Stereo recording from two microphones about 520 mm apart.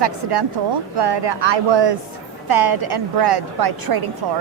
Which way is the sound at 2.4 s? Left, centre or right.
Right.